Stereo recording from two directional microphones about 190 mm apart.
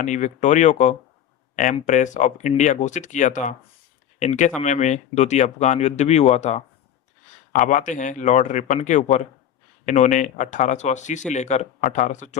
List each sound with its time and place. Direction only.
0.0 s speech: 40° left (ahead or behind)